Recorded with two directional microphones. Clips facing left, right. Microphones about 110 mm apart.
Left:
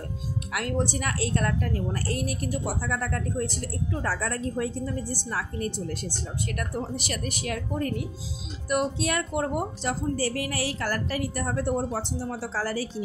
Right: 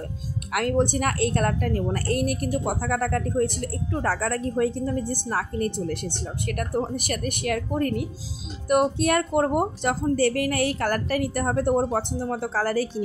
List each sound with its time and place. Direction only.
0.5 s a woman's voice: 55° right (ahead or behind)